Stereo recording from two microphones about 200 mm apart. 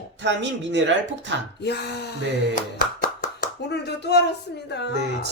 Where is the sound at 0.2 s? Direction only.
60° right (ahead or behind).